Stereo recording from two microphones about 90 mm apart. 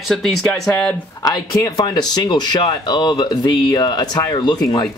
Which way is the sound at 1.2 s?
45° left (ahead or behind).